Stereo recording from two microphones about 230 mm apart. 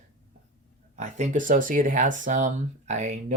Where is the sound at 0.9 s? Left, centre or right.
Right.